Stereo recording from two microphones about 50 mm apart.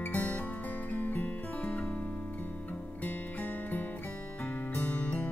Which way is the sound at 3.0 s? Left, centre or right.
Left.